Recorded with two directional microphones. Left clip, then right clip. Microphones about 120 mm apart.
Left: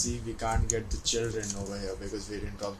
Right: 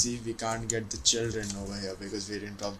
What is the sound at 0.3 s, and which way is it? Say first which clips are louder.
Speech: left 2 dB; 60° right (ahead or behind).